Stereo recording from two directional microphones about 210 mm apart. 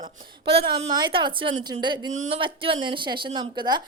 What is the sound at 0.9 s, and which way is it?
Speech, 20° right (ahead or behind).